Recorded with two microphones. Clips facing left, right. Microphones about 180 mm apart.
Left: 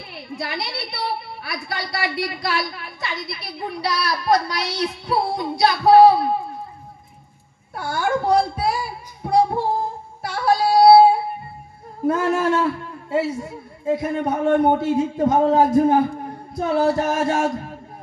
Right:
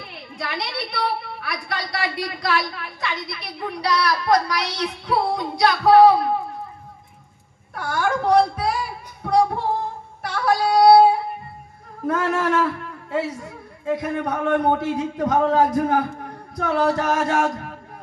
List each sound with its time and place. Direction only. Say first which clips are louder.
0.4 s a woman's voice: right 1 dB; 25° left (ahead or behind)
7.7 s a woman's voice: left 1 dB; 25° left (ahead or behind)
9.2 s female singing: left 1 dB; 25° left (ahead or behind)
10.2 s yodeling: left 1 dB; 25° left (ahead or behind)
12.1 s a woman's voice: left 2 dB; 25° left (ahead or behind)
16.2 s a sound: left 2 dB; 25° left (ahead or behind)